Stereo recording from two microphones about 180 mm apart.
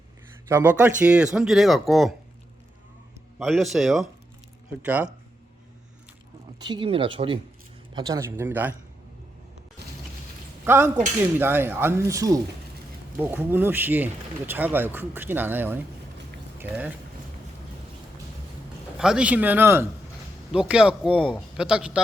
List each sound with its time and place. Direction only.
0.4 s speech: 15° right (ahead or behind)
3.3 s speech: centre (ahead or behind)
6.7 s speech: 30° right (ahead or behind)
7.9 s speech: 20° right (ahead or behind)
10.7 s speech: 15° right (ahead or behind)
18.9 s speech: 5° right (ahead or behind)